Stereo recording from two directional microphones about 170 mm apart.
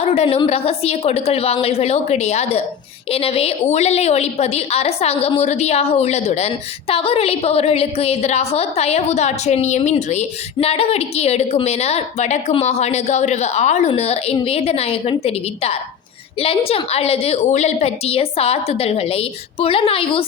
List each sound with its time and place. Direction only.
0.0 s a woman's voice: 35° left (ahead or behind)